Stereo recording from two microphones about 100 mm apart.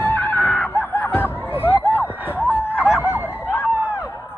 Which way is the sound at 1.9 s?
15° right (ahead or behind).